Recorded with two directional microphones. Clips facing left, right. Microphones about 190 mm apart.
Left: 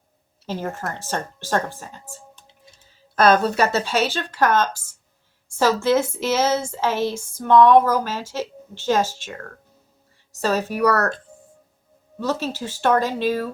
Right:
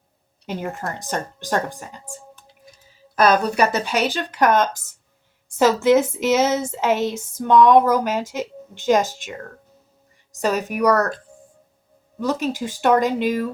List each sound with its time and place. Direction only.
0.4 s speech: 15° right (ahead or behind)
3.2 s speech: 10° right (ahead or behind)
10.4 s speech: 15° right (ahead or behind)
12.2 s speech: 15° right (ahead or behind)